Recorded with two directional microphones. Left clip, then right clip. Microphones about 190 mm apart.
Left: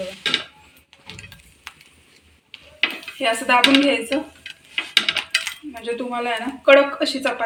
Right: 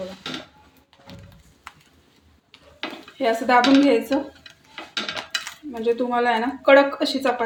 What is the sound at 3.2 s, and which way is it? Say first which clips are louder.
Speech: even; 60° right (ahead or behind).